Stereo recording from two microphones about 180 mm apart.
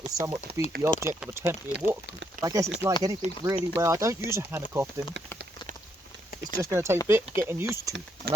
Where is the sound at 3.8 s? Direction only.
15° right (ahead or behind).